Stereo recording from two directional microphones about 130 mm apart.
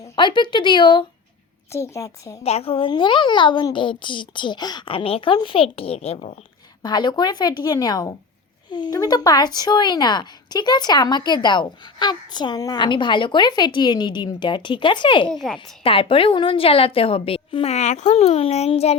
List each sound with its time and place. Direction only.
0.2 s speech: 35° left (ahead or behind)
1.7 s a woman's voice: 20° left (ahead or behind)
2.4 s speech: 50° left (ahead or behind); by 4.9 s 35° left (ahead or behind)
4.9 s a woman's voice: 45° left (ahead or behind)
6.8 s speech: 35° left (ahead or behind)
15.3 s a child's voice: 5° left (ahead or behind)
15.5 s a woman's voice: 45° left (ahead or behind)